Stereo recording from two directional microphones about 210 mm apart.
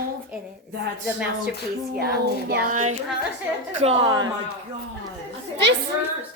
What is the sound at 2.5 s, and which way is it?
A woman's voice, 45° right (ahead or behind).